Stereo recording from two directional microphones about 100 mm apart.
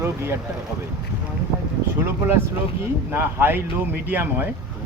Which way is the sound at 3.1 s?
20° right (ahead or behind).